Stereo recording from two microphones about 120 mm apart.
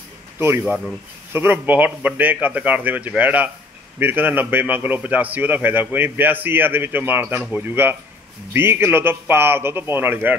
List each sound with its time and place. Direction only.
0.4 s a man's voice: 20° right (ahead or behind)